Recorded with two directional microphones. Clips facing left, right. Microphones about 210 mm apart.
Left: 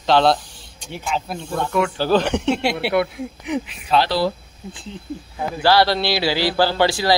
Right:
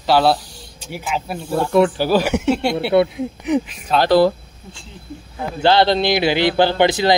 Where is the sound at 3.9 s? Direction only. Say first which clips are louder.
Right 5 dB; 50° right (ahead or behind).